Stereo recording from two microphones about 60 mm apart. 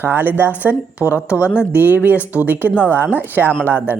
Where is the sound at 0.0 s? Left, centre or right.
Right.